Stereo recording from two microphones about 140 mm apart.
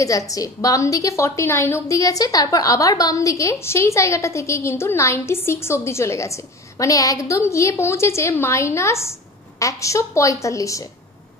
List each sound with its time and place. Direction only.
0.0 s a woman's voice: 25° left (ahead or behind)